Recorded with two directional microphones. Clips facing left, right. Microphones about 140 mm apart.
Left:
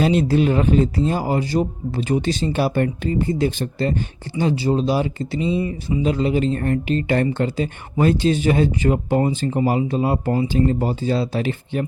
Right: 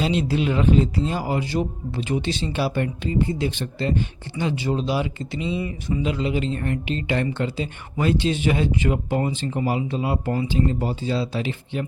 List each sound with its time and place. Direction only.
0.0 s speech: 45° left (ahead or behind)